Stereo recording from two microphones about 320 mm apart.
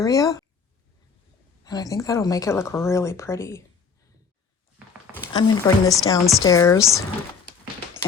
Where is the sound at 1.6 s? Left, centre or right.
Centre.